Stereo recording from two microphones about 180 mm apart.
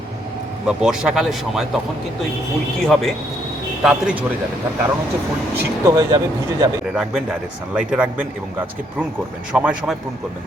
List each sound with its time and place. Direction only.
0.7 s speech: 5° right (ahead or behind)
2.8 s speech: centre (ahead or behind)
5.8 s speech: 15° right (ahead or behind)
6.9 s speech: 5° right (ahead or behind)
9.5 s speech: 5° right (ahead or behind)